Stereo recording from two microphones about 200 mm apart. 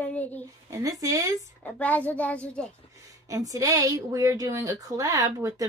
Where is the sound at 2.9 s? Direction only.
15° right (ahead or behind).